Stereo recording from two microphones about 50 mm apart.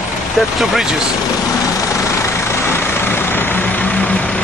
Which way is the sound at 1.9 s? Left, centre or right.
Left.